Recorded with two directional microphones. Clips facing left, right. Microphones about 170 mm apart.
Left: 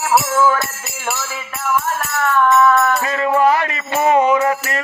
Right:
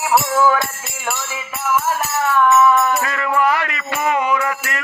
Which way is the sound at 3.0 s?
30° left (ahead or behind).